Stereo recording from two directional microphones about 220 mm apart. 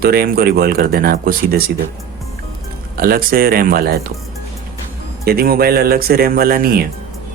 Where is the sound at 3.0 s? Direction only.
40° right (ahead or behind).